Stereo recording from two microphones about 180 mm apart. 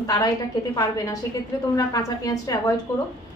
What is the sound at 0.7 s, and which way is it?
A woman's voice, 20° left (ahead or behind).